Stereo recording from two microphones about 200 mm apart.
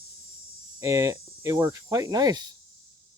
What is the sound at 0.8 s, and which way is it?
Speech, 15° right (ahead or behind).